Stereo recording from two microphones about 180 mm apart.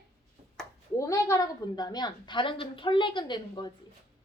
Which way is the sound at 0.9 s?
15° left (ahead or behind).